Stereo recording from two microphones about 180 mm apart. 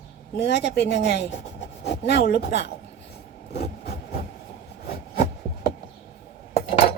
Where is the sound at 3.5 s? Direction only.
65° left (ahead or behind).